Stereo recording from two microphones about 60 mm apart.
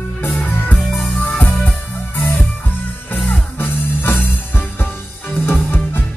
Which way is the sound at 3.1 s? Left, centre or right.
Left.